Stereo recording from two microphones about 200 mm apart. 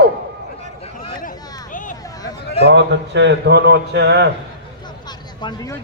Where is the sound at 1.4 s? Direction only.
20° left (ahead or behind).